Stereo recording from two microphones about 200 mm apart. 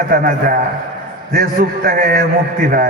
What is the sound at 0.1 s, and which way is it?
A man's voice, 45° right (ahead or behind).